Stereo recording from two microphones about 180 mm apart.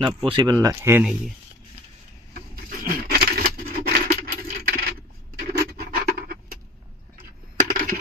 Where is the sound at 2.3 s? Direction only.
50° right (ahead or behind).